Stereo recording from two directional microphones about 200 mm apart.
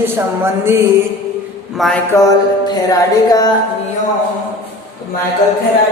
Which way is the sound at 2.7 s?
20° left (ahead or behind).